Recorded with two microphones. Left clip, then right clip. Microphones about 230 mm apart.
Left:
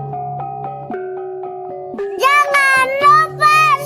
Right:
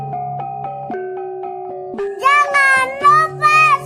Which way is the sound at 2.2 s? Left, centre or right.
Left.